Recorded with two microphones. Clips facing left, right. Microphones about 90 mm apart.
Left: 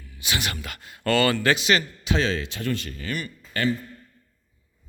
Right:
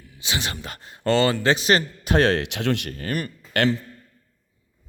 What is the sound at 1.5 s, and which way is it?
Speech, 40° right (ahead or behind).